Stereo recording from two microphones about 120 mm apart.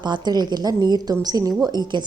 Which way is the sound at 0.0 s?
35° right (ahead or behind).